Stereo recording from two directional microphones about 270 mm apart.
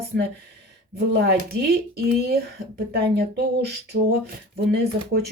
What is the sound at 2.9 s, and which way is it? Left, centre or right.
Speech, right.